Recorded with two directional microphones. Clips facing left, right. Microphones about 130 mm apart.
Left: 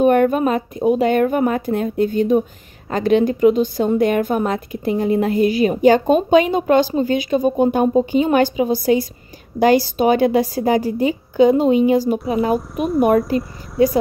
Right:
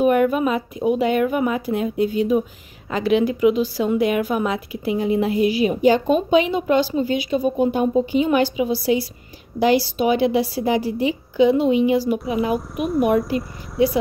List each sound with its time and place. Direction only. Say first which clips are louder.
0.0 s a woman's voice: left 3 dB; 40° left (ahead or behind)
12.5 s speech: left 3 dB; centre (ahead or behind)